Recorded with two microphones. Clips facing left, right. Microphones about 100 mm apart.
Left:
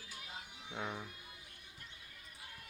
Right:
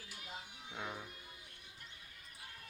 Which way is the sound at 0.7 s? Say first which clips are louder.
Left 3 dB; 20° left (ahead or behind).